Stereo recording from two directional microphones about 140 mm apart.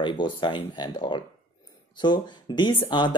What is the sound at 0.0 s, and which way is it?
Speech, 35° left (ahead or behind).